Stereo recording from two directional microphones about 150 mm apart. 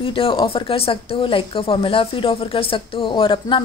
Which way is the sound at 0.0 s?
35° left (ahead or behind).